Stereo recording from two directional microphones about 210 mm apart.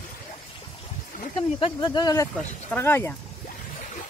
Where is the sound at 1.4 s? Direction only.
25° left (ahead or behind).